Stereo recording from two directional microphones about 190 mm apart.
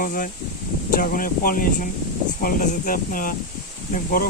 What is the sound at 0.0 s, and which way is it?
Speech, 45° left (ahead or behind).